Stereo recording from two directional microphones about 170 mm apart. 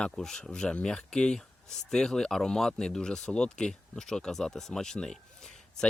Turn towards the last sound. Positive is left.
turn(degrees=0)  # may be behind; listen again after turning